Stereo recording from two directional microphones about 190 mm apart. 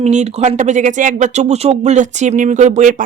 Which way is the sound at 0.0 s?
35° right (ahead or behind).